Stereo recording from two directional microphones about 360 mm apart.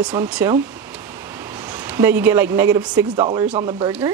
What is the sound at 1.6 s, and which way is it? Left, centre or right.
Speech, centre.